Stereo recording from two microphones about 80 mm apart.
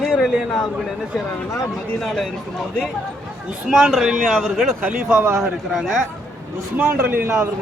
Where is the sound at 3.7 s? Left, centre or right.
Centre.